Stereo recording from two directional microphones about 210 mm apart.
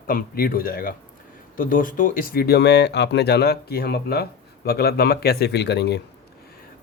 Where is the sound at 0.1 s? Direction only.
45° left (ahead or behind).